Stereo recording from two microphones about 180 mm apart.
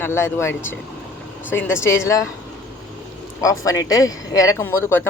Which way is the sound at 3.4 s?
15° left (ahead or behind).